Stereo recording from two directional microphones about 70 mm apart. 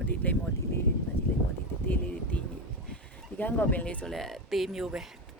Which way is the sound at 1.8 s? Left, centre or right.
Left.